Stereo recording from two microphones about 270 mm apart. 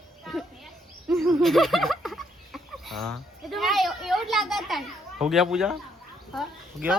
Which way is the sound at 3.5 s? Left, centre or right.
Centre.